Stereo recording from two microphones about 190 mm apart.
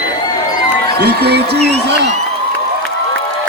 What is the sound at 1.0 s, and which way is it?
Speech, 60° right (ahead or behind).